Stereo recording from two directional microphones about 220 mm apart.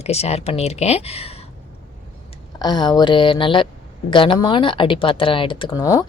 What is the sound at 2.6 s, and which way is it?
A woman's voice, 20° left (ahead or behind).